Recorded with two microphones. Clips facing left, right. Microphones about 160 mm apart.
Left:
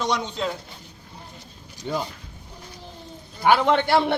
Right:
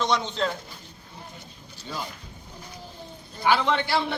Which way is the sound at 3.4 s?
55° left (ahead or behind).